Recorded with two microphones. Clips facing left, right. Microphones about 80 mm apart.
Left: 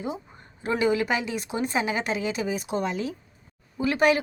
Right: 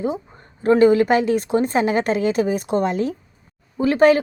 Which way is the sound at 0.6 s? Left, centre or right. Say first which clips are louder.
Right 10 dB; right.